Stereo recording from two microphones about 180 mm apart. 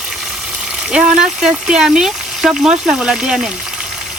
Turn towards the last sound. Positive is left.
turn(degrees=-5)  # may be behind; listen again after turning